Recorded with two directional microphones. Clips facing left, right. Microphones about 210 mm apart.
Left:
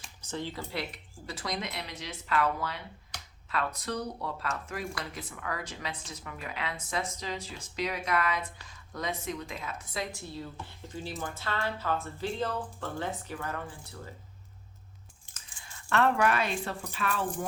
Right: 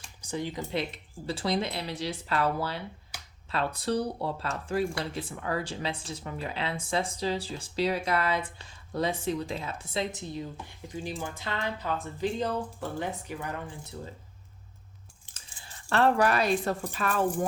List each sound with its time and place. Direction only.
0.2 s speech: 15° right (ahead or behind)
1.3 s speech: 30° right (ahead or behind)
3.1 s finger snapping: 10° right (ahead or behind)
3.5 s speech: 30° right (ahead or behind)
15.3 s speech: 30° right (ahead or behind)